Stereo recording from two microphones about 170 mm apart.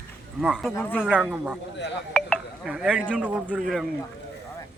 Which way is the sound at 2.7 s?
5° right (ahead or behind).